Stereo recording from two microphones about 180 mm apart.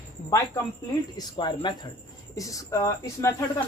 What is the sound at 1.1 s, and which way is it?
Speech, 25° left (ahead or behind).